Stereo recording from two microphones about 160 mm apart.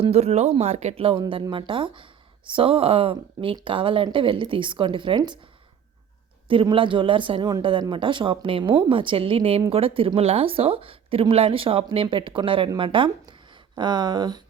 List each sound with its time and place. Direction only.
0.0 s speech: 40° right (ahead or behind)
6.5 s speech: 35° right (ahead or behind)